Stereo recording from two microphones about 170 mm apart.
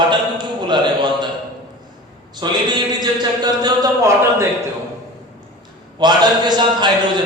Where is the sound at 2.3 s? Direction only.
25° right (ahead or behind).